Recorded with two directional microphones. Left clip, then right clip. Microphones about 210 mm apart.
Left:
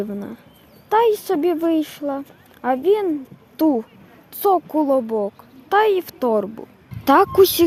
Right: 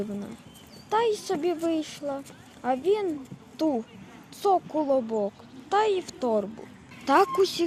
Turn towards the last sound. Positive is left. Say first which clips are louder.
# left 8 dB
turn(degrees=60)  # may be behind; listen again after turning